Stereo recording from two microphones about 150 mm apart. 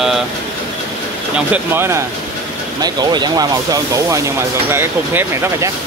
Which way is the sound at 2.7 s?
25° right (ahead or behind).